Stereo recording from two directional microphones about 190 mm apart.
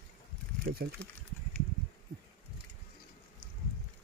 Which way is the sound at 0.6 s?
55° right (ahead or behind).